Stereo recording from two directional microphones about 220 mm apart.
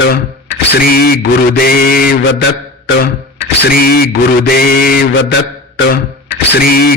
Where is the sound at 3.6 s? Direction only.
40° left (ahead or behind).